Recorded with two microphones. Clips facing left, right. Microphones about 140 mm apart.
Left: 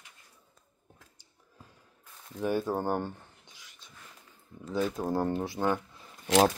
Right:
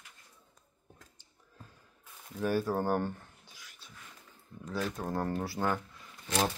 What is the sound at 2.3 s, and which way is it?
Speech, 20° left (ahead or behind).